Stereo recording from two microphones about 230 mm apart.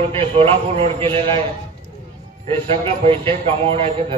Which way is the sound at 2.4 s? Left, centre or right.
Right.